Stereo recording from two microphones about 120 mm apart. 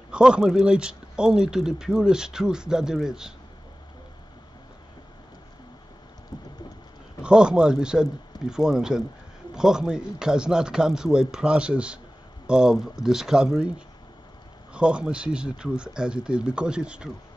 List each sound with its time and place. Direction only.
0.1 s speech: 5° right (ahead or behind)
6.3 s boat: 35° left (ahead or behind)
7.2 s speech: 5° right (ahead or behind)